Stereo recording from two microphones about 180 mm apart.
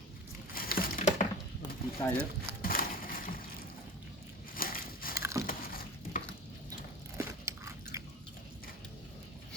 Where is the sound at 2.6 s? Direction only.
55° left (ahead or behind).